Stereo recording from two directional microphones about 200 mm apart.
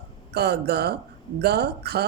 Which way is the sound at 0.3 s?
55° right (ahead or behind).